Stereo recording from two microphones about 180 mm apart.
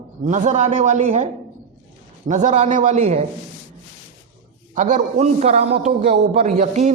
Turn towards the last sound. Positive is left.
turn(degrees=-40)  # may be behind; listen again after turning